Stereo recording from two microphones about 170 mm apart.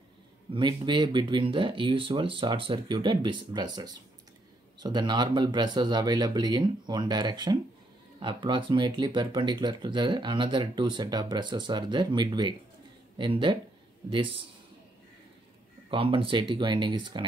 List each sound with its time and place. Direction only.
0.5 s speech: 30° right (ahead or behind)
15.9 s speech: 30° right (ahead or behind)